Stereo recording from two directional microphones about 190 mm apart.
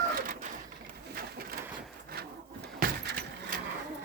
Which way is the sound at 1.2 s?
50° right (ahead or behind).